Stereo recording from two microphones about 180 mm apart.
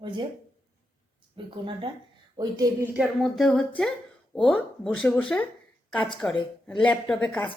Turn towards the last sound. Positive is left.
turn(degrees=5)  # may be behind; listen again after turning